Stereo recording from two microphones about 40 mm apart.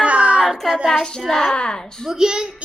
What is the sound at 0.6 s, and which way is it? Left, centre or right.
Child singing, centre.